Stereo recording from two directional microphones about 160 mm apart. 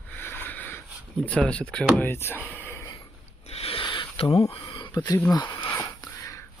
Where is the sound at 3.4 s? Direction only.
40° left (ahead or behind).